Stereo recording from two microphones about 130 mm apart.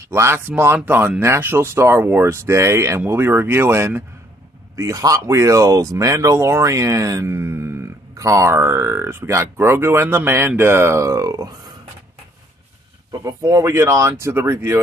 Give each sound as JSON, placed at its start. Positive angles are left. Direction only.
{"t": 0.0, "sound": "speech", "side_deg": -20}
{"t": 13.1, "sound": "speech", "side_deg": -25}